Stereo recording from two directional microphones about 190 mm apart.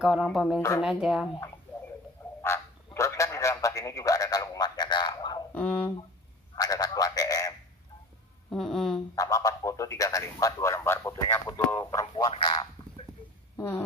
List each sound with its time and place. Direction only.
0.0 s speech: 5° right (ahead or behind)
0.6 s speech: 15° left (ahead or behind)
0.8 s speech: centre (ahead or behind)
2.4 s a sound: 15° left (ahead or behind)
5.5 s speech: 10° left (ahead or behind)
6.5 s a sound: 20° left (ahead or behind)
8.5 s speech: centre (ahead or behind)
9.1 s speech: 20° left (ahead or behind)
12.1 s speech: 25° left (ahead or behind)
13.6 s owl: 10° left (ahead or behind)